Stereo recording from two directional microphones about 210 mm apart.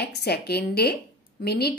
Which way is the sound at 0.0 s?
50° left (ahead or behind).